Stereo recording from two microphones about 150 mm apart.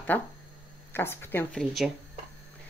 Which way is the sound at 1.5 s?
Centre (ahead or behind).